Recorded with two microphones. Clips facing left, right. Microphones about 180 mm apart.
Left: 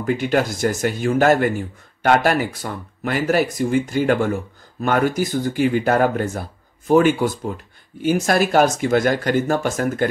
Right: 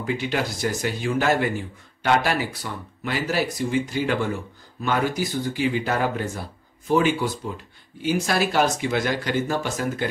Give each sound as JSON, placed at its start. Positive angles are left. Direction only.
{"t": 0.0, "sound": "speech", "side_deg": 50}